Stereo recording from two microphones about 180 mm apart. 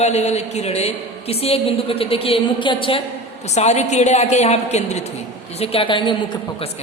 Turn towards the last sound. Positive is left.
turn(degrees=25)  # may be behind; listen again after turning